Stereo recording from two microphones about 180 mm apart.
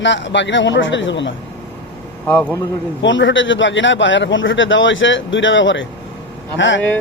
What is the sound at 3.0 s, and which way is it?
Speech, 90° left.